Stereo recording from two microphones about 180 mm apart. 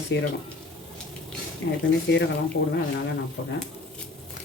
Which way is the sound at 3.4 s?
70° left (ahead or behind).